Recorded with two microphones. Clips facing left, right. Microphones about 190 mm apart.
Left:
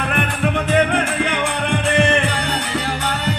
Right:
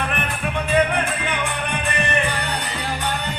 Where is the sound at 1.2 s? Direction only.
85° left.